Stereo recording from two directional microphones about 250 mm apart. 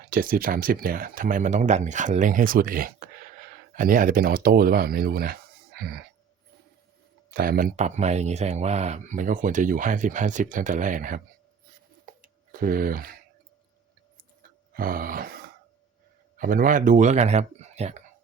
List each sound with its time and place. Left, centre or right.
0.0 s speech: right
7.3 s speech: right
12.1 s a sound: right
12.5 s speech: right
14.7 s a sound: right
16.4 s speech: right